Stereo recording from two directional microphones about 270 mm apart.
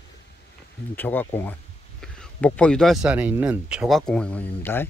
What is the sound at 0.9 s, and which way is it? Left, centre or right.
Speech, centre.